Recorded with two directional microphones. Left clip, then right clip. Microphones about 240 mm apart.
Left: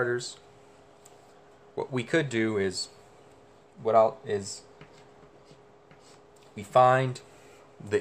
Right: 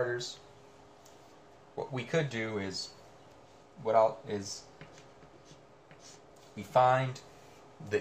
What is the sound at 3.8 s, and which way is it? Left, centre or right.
Speech, left.